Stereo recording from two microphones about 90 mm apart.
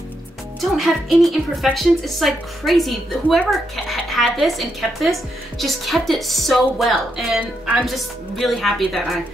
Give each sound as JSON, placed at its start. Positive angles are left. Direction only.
{"t": 0.6, "sound": "speech", "side_deg": 0}